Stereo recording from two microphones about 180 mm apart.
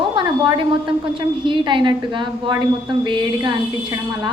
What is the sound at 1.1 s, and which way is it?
A woman's voice, 25° right (ahead or behind).